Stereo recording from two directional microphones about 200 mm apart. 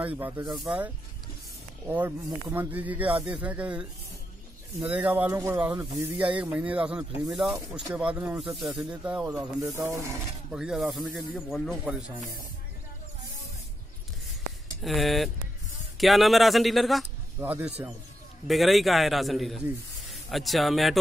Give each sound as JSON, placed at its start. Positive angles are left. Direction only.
{"t": 0.0, "sound": "a man's voice", "side_deg": -10}
{"t": 10.5, "sound": "a man's voice", "side_deg": 0}
{"t": 14.8, "sound": "a man's voice", "side_deg": 0}